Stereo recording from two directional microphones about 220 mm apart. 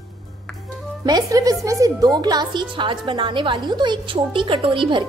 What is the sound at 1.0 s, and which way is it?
A woman's voice, 15° right (ahead or behind).